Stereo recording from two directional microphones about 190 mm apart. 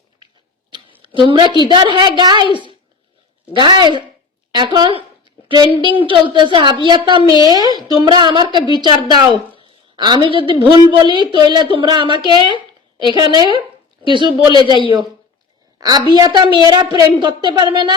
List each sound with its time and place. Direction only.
1.0 s a woman's voice: 25° right (ahead or behind)
3.5 s a woman's voice: 25° right (ahead or behind)
5.2 s a sound: 25° right (ahead or behind)
5.8 s a woman's voice: 25° right (ahead or behind)
7.2 s a man's voice: 25° left (ahead or behind)
7.4 s a woman's voice: 20° right (ahead or behind)
14.3 s a man's voice: 25° left (ahead or behind)
15.8 s a woman's voice: 20° right (ahead or behind)